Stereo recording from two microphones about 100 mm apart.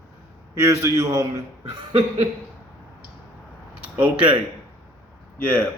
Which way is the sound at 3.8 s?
15° right (ahead or behind).